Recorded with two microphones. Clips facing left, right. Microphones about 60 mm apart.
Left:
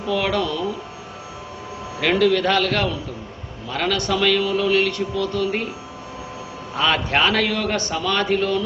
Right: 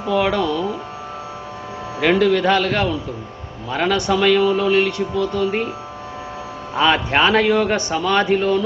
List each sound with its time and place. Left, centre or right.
0.0 s a man's voice: centre
2.0 s a man's voice: centre
6.7 s a man's voice: centre